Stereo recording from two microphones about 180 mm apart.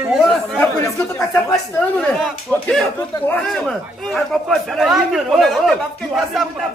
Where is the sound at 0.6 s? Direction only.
15° left (ahead or behind).